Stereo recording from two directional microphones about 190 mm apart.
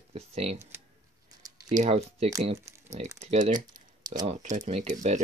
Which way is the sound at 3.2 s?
40° right (ahead or behind).